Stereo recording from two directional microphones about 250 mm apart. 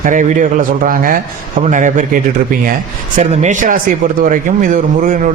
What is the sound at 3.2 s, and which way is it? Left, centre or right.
A man's voice, right.